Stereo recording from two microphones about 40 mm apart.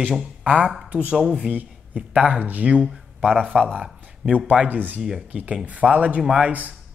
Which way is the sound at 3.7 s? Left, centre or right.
Right.